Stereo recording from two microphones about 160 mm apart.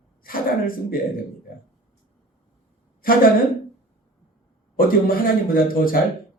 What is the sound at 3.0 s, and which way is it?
Speech, 65° left (ahead or behind).